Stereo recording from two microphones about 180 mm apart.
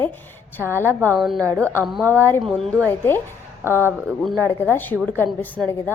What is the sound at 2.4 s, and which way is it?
Speech, centre (ahead or behind).